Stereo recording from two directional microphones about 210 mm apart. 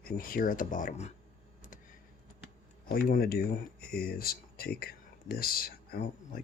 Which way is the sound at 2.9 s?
45° left (ahead or behind).